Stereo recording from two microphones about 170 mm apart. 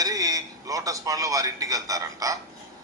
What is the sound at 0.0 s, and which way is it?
A man's voice, 20° right (ahead or behind).